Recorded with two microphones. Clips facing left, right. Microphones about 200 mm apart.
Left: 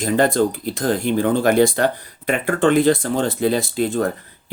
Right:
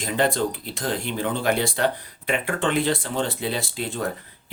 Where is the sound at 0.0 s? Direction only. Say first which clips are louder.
Left 6 dB; 45° left (ahead or behind).